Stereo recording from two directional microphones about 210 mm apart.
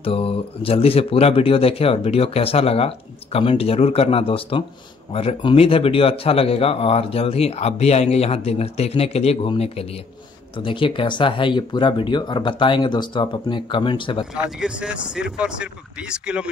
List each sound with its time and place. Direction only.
0.0 s a man's voice: 25° left (ahead or behind)
14.3 s speech: 5° right (ahead or behind)